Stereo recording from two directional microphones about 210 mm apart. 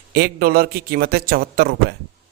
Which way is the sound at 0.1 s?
45° right (ahead or behind).